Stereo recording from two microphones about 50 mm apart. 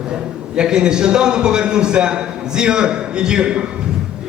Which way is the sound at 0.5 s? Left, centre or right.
Centre.